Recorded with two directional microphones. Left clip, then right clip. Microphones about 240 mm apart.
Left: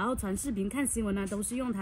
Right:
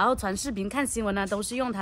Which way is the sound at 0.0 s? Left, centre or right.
Centre.